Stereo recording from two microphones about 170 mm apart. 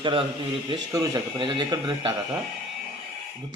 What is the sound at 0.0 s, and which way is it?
A man's voice, 30° right (ahead or behind).